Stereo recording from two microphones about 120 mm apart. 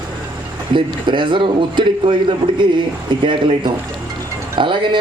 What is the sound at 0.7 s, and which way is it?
A man's voice, 40° right (ahead or behind).